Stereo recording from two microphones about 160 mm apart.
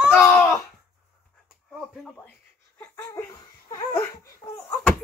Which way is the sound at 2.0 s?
10° left (ahead or behind).